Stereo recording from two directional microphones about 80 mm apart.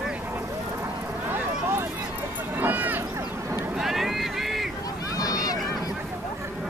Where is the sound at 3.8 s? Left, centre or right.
Centre.